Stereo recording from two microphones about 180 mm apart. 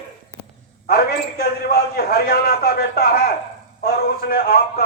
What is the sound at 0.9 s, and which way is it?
Speech, 60° left (ahead or behind).